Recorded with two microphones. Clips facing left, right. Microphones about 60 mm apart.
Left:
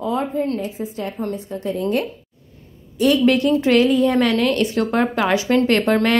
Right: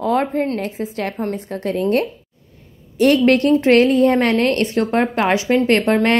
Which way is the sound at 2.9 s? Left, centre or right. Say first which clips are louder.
Right 2 dB; right.